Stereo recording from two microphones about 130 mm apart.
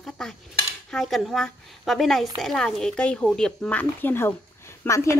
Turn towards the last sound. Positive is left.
turn(degrees=20)  # may be behind; listen again after turning